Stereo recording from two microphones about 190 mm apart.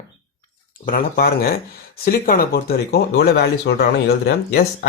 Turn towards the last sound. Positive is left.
turn(degrees=55)  # may be behind; listen again after turning